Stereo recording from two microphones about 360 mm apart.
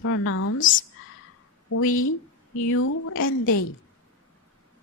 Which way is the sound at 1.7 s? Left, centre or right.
Left.